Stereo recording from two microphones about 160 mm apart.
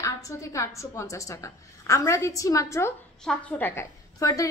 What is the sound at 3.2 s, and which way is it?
A woman's voice, 5° left (ahead or behind).